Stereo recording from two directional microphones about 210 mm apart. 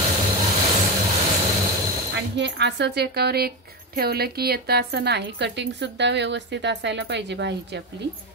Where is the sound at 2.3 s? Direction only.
55° right (ahead or behind).